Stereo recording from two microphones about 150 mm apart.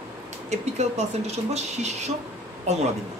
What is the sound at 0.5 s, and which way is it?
Speech, 50° right (ahead or behind).